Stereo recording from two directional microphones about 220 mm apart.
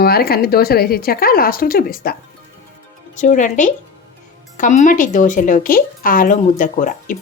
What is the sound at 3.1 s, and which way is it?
A woman's voice, 35° left (ahead or behind).